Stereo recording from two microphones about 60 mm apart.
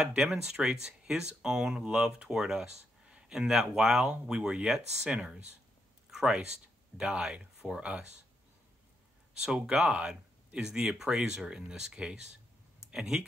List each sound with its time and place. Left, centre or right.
0.0 s speech: centre
9.4 s speech: centre